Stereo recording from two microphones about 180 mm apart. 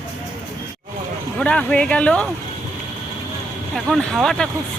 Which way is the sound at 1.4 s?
5° left (ahead or behind).